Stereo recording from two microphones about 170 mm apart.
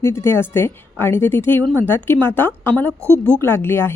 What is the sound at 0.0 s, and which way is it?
A woman's voice, 15° left (ahead or behind).